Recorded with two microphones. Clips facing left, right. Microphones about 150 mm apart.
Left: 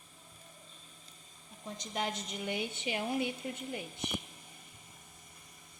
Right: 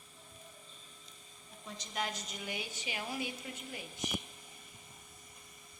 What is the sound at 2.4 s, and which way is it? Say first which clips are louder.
A woman's voice: left 7 dB; 55° left (ahead or behind).